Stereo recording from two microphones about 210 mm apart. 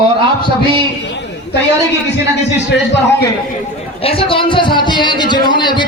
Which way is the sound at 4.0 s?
25° left (ahead or behind).